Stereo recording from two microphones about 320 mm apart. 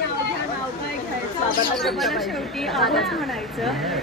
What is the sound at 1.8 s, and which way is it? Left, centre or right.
Speech, centre.